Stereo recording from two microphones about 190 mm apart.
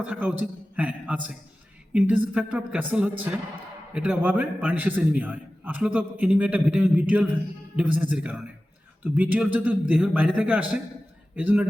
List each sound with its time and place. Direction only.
0.0 s a man's voice: 10° right (ahead or behind)